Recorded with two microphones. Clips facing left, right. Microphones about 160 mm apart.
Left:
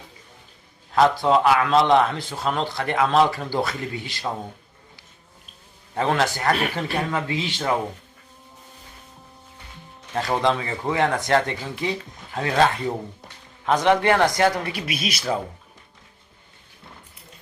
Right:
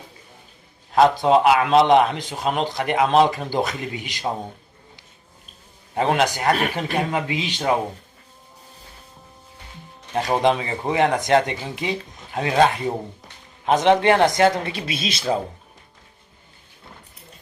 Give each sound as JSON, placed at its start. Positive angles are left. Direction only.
{"t": 0.9, "sound": "a man's voice", "side_deg": -20}
{"t": 5.9, "sound": "a man's voice", "side_deg": -20}
{"t": 6.5, "sound": "speech", "side_deg": -40}
{"t": 6.7, "sound": "a man's voice", "side_deg": -20}
{"t": 10.2, "sound": "a man's voice", "side_deg": -20}